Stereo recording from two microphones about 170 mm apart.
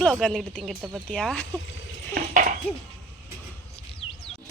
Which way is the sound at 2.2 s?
50° right (ahead or behind).